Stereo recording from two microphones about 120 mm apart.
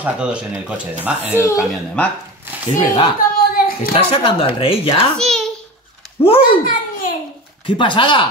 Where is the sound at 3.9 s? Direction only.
50° left (ahead or behind).